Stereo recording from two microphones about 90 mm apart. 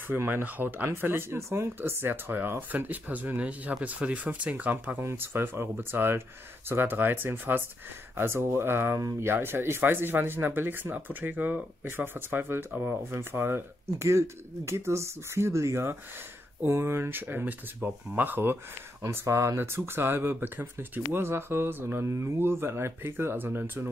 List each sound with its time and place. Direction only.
0.1 s speech: 20° right (ahead or behind)
19.0 s speech: 35° right (ahead or behind)